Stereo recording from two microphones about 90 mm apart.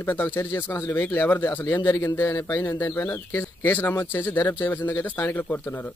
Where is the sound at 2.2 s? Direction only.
35° left (ahead or behind).